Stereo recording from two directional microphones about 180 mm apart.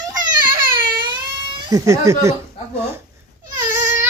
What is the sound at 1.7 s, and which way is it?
Speech, 20° right (ahead or behind).